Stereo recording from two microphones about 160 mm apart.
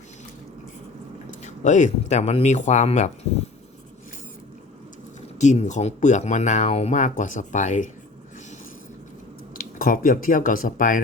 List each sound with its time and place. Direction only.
1.5 s speech: 50° left (ahead or behind)
5.4 s speech: 50° left (ahead or behind)
9.7 s speech: 60° left (ahead or behind)